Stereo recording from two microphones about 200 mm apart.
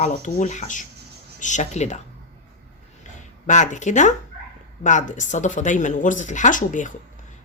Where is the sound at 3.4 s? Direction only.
40° left (ahead or behind).